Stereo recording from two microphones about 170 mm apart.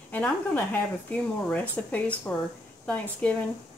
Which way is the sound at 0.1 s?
10° left (ahead or behind).